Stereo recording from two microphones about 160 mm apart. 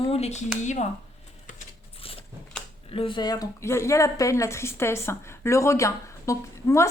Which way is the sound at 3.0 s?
30° left (ahead or behind).